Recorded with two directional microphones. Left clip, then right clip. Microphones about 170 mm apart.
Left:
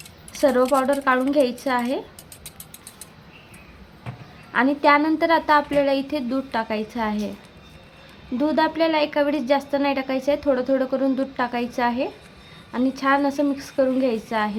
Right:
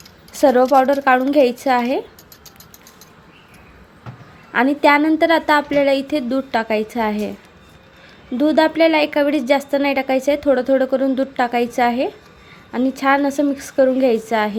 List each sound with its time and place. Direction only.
0.3 s speech: 20° right (ahead or behind)
4.5 s a woman's voice: 15° right (ahead or behind)
8.4 s a woman's voice: 15° right (ahead or behind)